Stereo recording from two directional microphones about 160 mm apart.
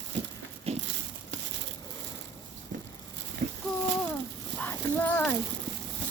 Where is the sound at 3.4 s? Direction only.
50° right (ahead or behind).